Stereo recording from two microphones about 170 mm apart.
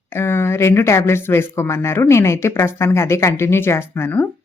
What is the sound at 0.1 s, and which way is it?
Speech, 15° left (ahead or behind).